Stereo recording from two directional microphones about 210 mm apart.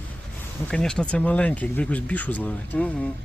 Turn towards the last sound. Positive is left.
turn(degrees=5)  # may be behind; listen again after turning